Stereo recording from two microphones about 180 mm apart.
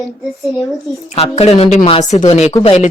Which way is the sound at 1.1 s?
35° left (ahead or behind).